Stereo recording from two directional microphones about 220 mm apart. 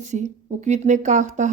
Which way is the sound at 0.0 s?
35° right (ahead or behind).